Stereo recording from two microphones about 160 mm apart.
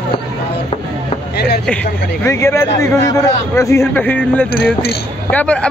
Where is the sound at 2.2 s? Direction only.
15° left (ahead or behind).